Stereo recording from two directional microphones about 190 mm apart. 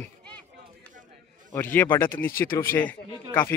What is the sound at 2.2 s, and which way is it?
Speech, 50° left (ahead or behind).